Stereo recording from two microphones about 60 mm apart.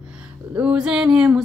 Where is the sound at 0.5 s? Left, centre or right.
Centre.